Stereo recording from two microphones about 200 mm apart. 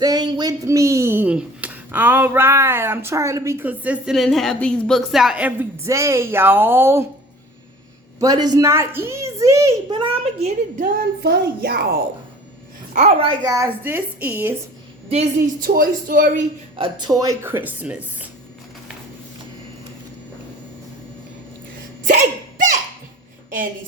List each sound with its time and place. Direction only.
0.0 s speech: 20° right (ahead or behind)
8.2 s speech: 20° right (ahead or behind)
10.8 s speech: 45° right (ahead or behind)
12.9 s speech: 35° right (ahead or behind); by 14.5 s 10° right (ahead or behind)
15.6 s speech: 45° right (ahead or behind)
16.7 s speech: 25° right (ahead or behind); by 18.3 s 10° right (ahead or behind)
22.0 s a sound: 40° right (ahead or behind)